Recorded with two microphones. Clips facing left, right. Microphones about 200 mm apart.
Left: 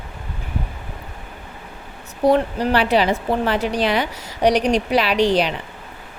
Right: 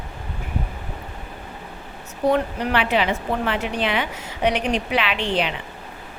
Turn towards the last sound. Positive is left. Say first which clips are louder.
# left 6 dB
turn(degrees=40)  # may be behind; listen again after turning